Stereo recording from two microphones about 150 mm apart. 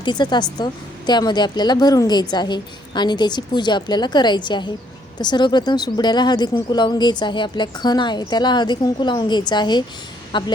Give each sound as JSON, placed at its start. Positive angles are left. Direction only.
{"t": 0.0, "sound": "a woman's voice", "side_deg": 30}